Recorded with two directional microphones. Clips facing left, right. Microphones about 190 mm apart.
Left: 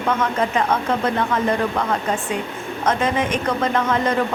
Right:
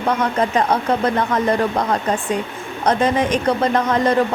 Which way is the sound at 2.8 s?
35° right (ahead or behind).